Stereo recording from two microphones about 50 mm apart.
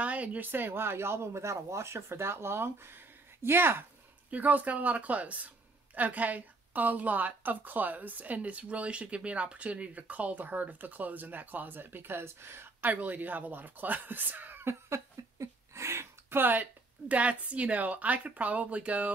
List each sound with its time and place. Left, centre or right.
0.0 s speech: right
4.3 s a woman's voice: right
12.9 s a woman's voice: right
14.6 s speech: right
15.3 s a sound: right
17.1 s a woman's voice: right